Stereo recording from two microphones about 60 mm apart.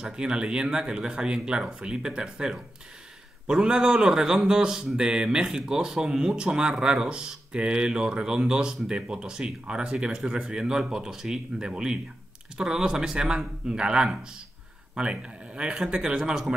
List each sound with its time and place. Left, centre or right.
0.0 s a man's voice: centre